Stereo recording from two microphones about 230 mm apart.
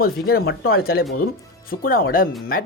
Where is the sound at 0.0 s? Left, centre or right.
Left.